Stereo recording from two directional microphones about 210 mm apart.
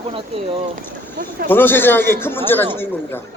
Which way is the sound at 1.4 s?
10° left (ahead or behind).